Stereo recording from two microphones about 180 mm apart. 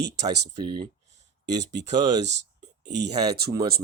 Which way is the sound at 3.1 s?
20° right (ahead or behind).